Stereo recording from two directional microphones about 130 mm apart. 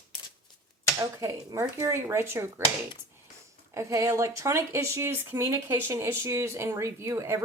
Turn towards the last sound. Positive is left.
turn(degrees=-20)  # may be behind; listen again after turning